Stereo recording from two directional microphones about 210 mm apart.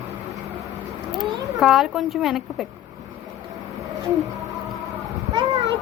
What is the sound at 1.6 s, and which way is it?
A woman's voice, centre (ahead or behind).